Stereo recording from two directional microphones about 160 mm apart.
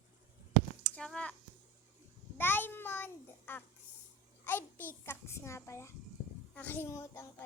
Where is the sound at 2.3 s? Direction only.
15° left (ahead or behind).